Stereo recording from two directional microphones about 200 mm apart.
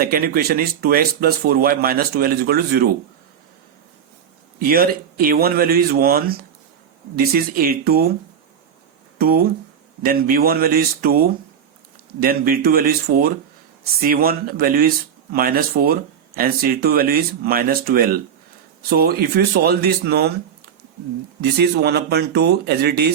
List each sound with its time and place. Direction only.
0.0 s speech: 45° right (ahead or behind)
4.6 s speech: 45° right (ahead or behind)
9.1 s speech: 50° right (ahead or behind)
12.2 s speech: 45° right (ahead or behind)
21.4 s speech: 55° right (ahead or behind)